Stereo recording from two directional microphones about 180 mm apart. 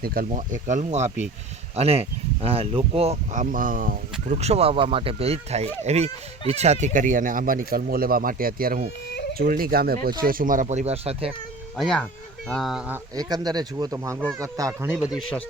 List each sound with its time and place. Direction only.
0.0 s speech: 55° right (ahead or behind); by 3.4 s 35° right (ahead or behind)
3.5 s speech: 50° right (ahead or behind); by 11.3 s 35° right (ahead or behind)
11.8 s speech: 5° left (ahead or behind)
12.9 s speech: 20° right (ahead or behind); by 15.2 s 5° right (ahead or behind)